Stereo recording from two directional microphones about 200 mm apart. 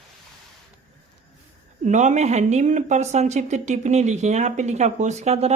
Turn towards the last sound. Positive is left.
turn(degrees=-30)  # may be behind; listen again after turning